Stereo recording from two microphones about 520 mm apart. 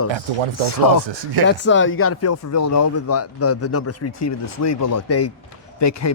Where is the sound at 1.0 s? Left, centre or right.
Right.